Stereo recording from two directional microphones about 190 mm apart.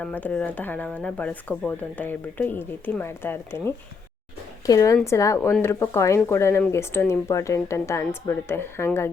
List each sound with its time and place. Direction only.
0.0 s speech: 10° left (ahead or behind)